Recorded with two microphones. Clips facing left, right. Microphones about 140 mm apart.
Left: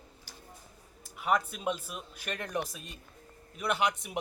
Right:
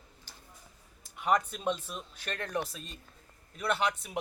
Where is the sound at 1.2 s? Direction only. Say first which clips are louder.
Right 1 dB; 5° left (ahead or behind).